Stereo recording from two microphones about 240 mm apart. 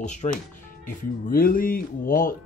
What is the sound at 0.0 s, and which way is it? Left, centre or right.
Speech, left.